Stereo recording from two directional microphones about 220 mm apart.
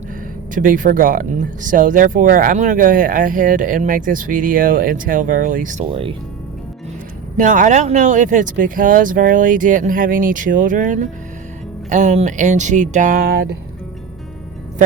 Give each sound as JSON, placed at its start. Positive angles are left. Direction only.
{"t": 0.5, "sound": "speech", "side_deg": -35}
{"t": 5.9, "sound": "speech", "side_deg": -25}
{"t": 7.3, "sound": "speech", "side_deg": -35}